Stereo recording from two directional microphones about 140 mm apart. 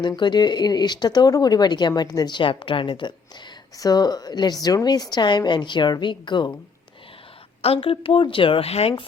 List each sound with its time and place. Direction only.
0.0 s a woman's voice: 30° left (ahead or behind)
7.6 s speech: 45° left (ahead or behind)